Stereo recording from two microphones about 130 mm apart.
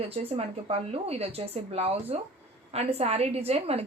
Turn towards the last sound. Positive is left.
turn(degrees=-50)  # may be behind; listen again after turning